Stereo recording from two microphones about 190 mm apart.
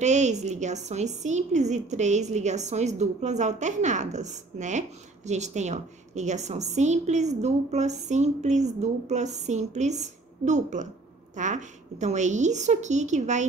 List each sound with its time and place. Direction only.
0.0 s a woman's voice: 40° right (ahead or behind)